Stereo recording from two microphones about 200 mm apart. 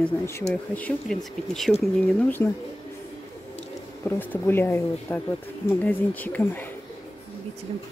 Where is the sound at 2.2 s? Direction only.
10° left (ahead or behind).